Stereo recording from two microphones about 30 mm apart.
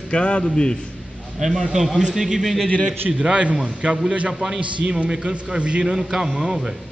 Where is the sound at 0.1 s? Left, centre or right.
Left.